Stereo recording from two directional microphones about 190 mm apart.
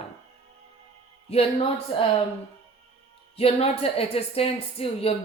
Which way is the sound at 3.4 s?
30° left (ahead or behind).